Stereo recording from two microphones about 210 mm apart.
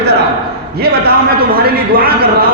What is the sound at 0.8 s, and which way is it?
A man's voice, 50° right (ahead or behind).